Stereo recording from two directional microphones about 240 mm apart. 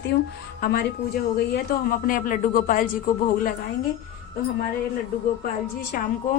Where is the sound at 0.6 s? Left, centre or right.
Left.